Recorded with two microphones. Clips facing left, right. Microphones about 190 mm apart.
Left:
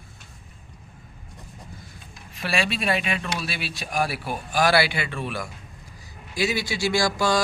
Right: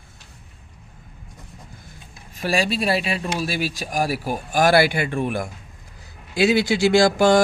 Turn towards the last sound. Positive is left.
turn(degrees=-50)  # may be behind; listen again after turning